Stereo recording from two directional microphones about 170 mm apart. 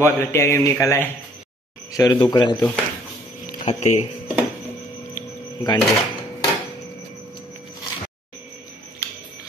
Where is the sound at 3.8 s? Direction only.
45° left (ahead or behind).